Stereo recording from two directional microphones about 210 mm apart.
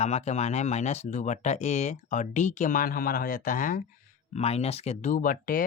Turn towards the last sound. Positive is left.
turn(degrees=40)  # may be behind; listen again after turning